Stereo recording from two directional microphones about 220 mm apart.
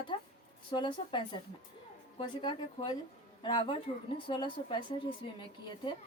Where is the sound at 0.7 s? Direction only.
20° left (ahead or behind).